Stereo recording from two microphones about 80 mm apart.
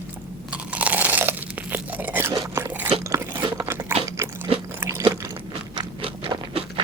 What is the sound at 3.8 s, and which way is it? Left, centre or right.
Crunch, right.